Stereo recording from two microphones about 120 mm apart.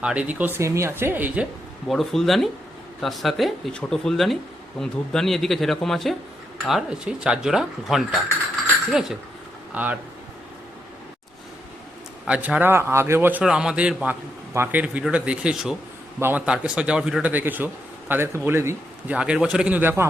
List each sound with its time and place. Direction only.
0.0 s a man's voice: 10° right (ahead or behind)
1.9 s a man's voice: centre (ahead or behind)
12.2 s a man's voice: 10° right (ahead or behind)
13.4 s a man's voice: 5° right (ahead or behind); by 19.1 s 20° right (ahead or behind)
19.1 s a man's voice: 10° right (ahead or behind)